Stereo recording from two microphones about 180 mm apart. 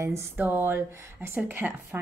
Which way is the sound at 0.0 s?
15° right (ahead or behind).